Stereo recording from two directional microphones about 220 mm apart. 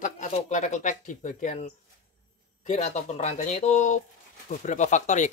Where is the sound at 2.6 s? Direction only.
30° left (ahead or behind).